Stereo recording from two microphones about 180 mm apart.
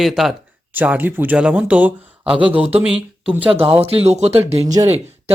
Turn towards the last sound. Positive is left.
turn(degrees=-15)  # may be behind; listen again after turning